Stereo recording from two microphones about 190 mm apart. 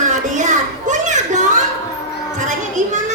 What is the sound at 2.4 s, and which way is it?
Children playing, 40° right (ahead or behind).